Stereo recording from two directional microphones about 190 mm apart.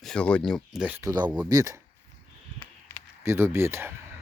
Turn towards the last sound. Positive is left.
turn(degrees=-15)  # may be behind; listen again after turning